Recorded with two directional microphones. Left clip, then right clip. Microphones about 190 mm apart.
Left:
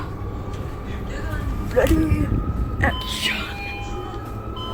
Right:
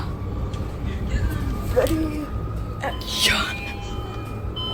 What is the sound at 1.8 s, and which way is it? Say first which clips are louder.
Speech: left 2 dB; 10° left (ahead or behind).